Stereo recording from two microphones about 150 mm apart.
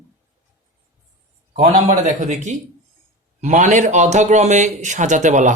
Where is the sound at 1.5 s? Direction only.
55° right (ahead or behind).